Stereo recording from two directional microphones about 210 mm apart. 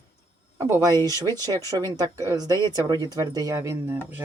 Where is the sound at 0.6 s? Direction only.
15° right (ahead or behind).